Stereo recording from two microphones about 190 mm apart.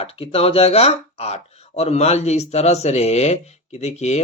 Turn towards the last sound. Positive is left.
turn(degrees=35)  # may be behind; listen again after turning